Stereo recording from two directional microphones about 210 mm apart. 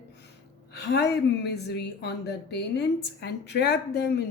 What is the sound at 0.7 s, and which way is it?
Speech, 50° left (ahead or behind).